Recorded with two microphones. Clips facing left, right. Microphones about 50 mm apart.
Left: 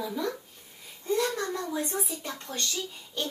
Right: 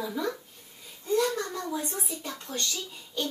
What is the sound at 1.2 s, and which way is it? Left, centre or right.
Speech, left.